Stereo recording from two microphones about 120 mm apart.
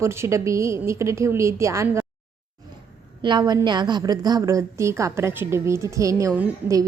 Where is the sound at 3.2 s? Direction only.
35° right (ahead or behind).